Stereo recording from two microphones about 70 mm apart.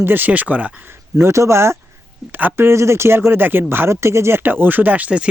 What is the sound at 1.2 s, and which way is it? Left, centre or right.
Speech, right.